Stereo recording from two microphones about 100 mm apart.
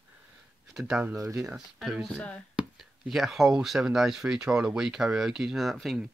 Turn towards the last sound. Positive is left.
turn(degrees=0)  # may be behind; listen again after turning